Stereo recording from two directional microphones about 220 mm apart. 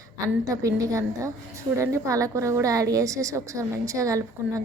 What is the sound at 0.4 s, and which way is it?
A woman's voice, 15° right (ahead or behind).